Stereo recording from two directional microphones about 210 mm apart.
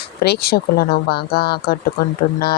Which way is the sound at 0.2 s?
50° left (ahead or behind).